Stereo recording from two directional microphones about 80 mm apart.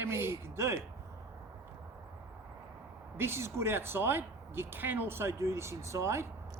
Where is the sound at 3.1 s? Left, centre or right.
Right.